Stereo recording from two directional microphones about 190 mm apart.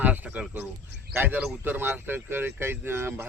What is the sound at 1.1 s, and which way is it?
Speech, 10° right (ahead or behind).